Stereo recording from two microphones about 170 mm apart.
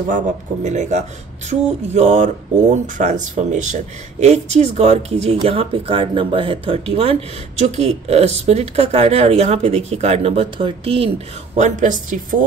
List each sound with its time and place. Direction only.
0.7 s speech: 45° right (ahead or behind)
11.5 s speech: 45° right (ahead or behind)